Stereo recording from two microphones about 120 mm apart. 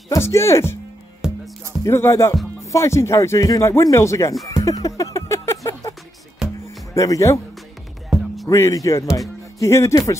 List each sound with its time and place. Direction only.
0.1 s speech: 20° left (ahead or behind)
1.2 s music: 5° right (ahead or behind)
1.9 s speech: 25° left (ahead or behind)
4.6 s music: 30° left (ahead or behind)
6.4 s music: 5° right (ahead or behind)
6.9 s speech: 25° left (ahead or behind)
8.1 s music: 5° right (ahead or behind)
8.5 s speech: 25° left (ahead or behind)